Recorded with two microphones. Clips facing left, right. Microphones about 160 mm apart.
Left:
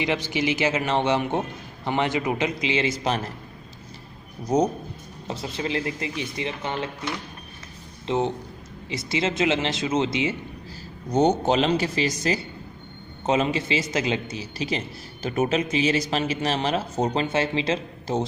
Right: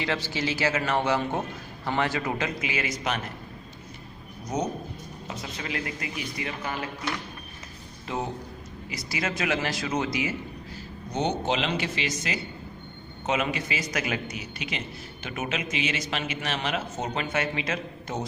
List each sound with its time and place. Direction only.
0.0 s a man's voice: 20° left (ahead or behind)
4.4 s a man's voice: 35° left (ahead or behind)
11.1 s a man's voice: 40° left (ahead or behind)